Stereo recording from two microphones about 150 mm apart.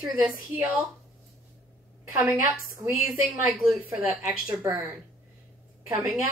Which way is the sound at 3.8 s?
20° right (ahead or behind).